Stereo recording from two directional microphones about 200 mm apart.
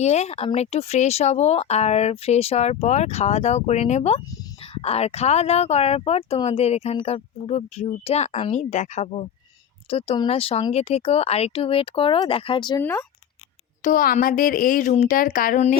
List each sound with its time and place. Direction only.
0.0 s speech: 35° left (ahead or behind)
12.8 s speech: 10° left (ahead or behind)
13.8 s speech: 45° left (ahead or behind)